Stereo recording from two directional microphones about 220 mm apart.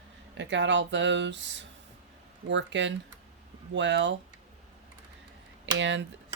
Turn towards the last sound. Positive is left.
turn(degrees=-55)  # may be behind; listen again after turning